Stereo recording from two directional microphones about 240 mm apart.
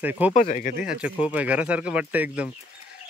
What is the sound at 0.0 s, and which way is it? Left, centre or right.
Speech, centre.